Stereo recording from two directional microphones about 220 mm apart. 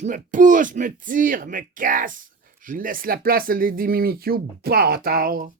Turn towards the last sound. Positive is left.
turn(degrees=-45)  # may be behind; listen again after turning